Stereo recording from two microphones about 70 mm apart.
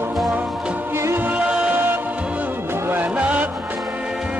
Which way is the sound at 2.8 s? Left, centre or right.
Right.